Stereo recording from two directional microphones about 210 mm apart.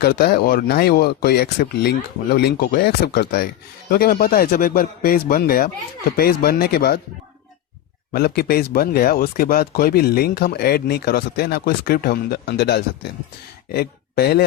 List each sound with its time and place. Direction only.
0.0 s speech: 50° left (ahead or behind)
8.1 s speech: 45° left (ahead or behind)